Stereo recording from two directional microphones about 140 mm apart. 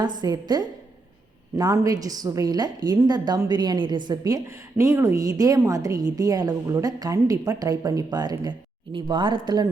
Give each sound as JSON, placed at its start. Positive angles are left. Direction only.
{"t": 0.2, "sound": "a woman's voice", "side_deg": -30}